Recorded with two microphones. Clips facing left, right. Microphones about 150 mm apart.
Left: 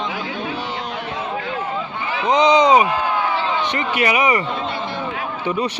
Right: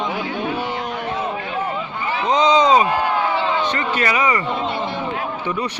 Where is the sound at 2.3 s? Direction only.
15° left (ahead or behind).